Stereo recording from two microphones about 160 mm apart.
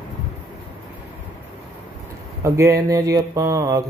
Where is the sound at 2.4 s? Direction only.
20° right (ahead or behind).